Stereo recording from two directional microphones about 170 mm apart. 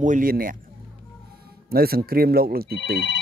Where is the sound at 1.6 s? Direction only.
60° right (ahead or behind).